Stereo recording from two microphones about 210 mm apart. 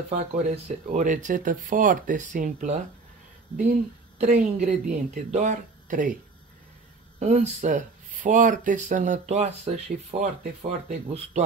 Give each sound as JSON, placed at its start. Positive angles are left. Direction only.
{"t": 0.1, "sound": "speech", "side_deg": -30}
{"t": 4.2, "sound": "speech", "side_deg": -30}
{"t": 7.2, "sound": "speech", "side_deg": -35}